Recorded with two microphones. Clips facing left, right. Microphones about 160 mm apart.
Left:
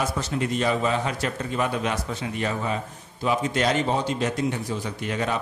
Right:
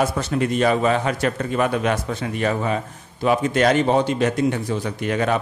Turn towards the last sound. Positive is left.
turn(degrees=-60)  # may be behind; listen again after turning